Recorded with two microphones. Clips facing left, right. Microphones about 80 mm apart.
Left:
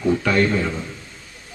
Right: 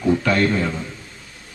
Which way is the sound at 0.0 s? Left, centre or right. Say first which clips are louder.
Right 1 dB; centre.